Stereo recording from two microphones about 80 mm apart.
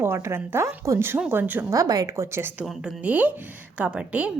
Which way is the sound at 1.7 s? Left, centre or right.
Right.